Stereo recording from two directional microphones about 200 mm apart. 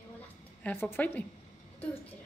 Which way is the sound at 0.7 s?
10° left (ahead or behind).